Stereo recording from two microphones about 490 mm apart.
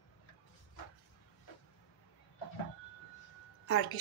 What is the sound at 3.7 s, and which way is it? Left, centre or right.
Speech, left.